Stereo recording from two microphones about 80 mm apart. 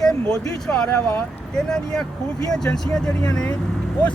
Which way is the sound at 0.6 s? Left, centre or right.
Centre.